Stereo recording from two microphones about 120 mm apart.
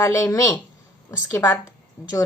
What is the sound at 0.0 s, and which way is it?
A woman's voice, 25° left (ahead or behind).